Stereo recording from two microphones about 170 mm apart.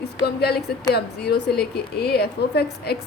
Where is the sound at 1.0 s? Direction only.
70° left (ahead or behind).